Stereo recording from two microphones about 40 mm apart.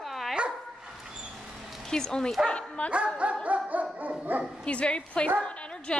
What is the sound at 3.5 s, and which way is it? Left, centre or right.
Dog, right.